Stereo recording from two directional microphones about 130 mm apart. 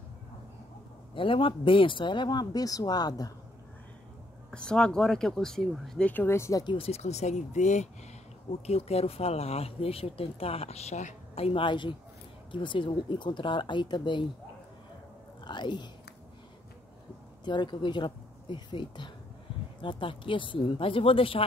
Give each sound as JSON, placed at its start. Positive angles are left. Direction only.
{"t": 1.1, "sound": "speech", "side_deg": 40}
{"t": 4.5, "sound": "speech", "side_deg": 5}
{"t": 6.6, "sound": "speech", "side_deg": 40}
{"t": 6.9, "sound": "speech", "side_deg": 60}
{"t": 8.6, "sound": "speech", "side_deg": 55}
{"t": 15.4, "sound": "speech", "side_deg": 35}
{"t": 17.5, "sound": "speech", "side_deg": 35}